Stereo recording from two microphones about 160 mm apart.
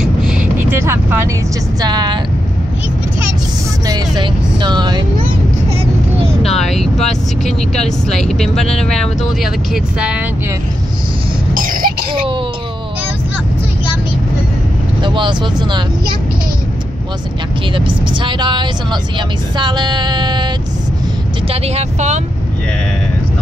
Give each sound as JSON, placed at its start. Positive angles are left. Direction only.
{"t": 0.0, "sound": "vehicle", "side_deg": -5}
{"t": 1.8, "sound": "speech", "side_deg": -25}
{"t": 3.8, "sound": "music", "side_deg": -25}
{"t": 6.6, "sound": "speech", "side_deg": 0}
{"t": 9.9, "sound": "speech", "side_deg": -10}
{"t": 11.5, "sound": "cough", "side_deg": -60}
{"t": 12.1, "sound": "speech", "side_deg": -35}
{"t": 15.0, "sound": "speech", "side_deg": -30}
{"t": 17.7, "sound": "speech", "side_deg": -30}
{"t": 21.5, "sound": "speech", "side_deg": -40}